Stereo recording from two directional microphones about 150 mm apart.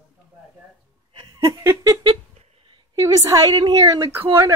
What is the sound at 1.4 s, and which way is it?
Laughter, 20° right (ahead or behind).